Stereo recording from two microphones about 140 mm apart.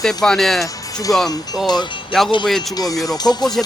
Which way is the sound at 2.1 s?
Centre (ahead or behind).